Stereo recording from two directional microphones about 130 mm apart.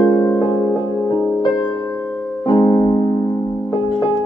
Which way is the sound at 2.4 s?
30° left (ahead or behind).